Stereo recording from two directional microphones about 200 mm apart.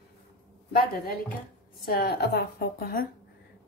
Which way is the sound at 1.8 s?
50° left (ahead or behind).